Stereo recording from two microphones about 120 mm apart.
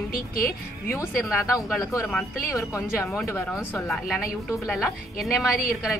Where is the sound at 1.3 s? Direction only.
Centre (ahead or behind).